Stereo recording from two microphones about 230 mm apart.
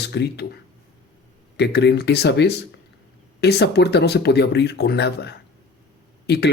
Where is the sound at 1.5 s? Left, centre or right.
Left.